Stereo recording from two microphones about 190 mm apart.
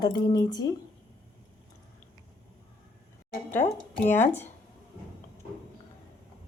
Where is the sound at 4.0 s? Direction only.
10° left (ahead or behind).